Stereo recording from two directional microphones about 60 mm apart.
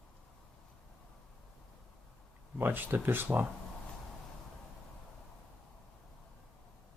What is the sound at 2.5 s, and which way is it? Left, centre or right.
Speech, right.